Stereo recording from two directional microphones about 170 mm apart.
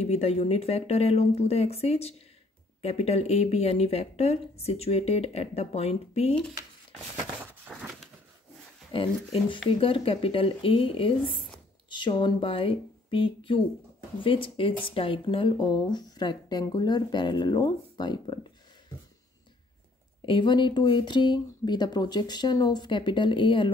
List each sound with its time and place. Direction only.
0.0 s speech: 40° left (ahead or behind)
7.7 s a sound: centre (ahead or behind)
8.9 s speech: 30° left (ahead or behind)
20.2 s speech: 30° left (ahead or behind)